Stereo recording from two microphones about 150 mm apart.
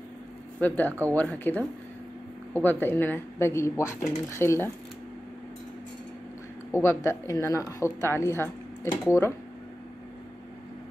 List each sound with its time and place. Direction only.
0.6 s speech: 10° left (ahead or behind)
6.7 s a woman's voice: 20° left (ahead or behind)